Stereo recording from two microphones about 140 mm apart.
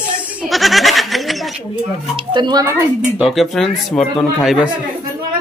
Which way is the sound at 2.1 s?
35° right (ahead or behind).